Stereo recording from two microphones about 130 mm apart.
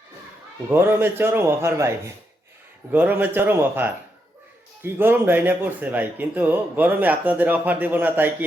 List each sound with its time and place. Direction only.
0.7 s speech: 15° right (ahead or behind)
2.9 s speech: 15° right (ahead or behind)